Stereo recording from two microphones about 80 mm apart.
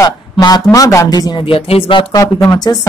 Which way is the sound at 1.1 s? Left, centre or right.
Left.